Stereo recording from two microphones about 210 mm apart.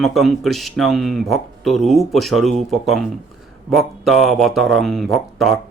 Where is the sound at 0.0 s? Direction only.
Centre (ahead or behind).